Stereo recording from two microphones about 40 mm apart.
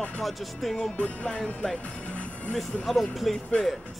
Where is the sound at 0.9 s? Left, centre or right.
Left.